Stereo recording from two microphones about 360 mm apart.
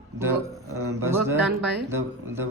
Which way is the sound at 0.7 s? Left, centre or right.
Right.